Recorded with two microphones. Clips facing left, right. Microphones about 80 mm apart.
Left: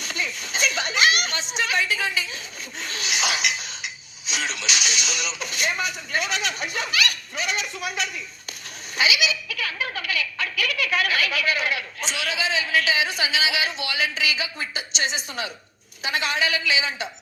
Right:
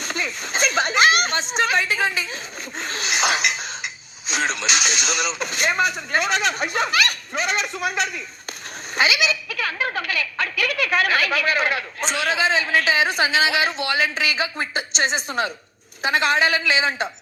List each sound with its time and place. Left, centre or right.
0.0 s speech: right
9.0 s a sound: right
11.9 s speech: right